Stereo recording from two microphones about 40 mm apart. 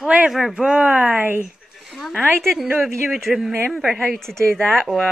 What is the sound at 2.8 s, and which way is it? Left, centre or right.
A woman's voice, centre.